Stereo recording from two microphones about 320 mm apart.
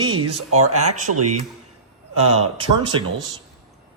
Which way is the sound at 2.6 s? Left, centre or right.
Centre.